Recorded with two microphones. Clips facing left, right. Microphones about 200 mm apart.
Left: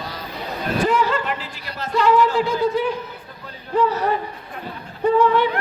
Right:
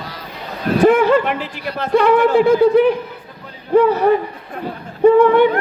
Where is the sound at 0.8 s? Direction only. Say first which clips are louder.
Right 9 dB; 60° right (ahead or behind).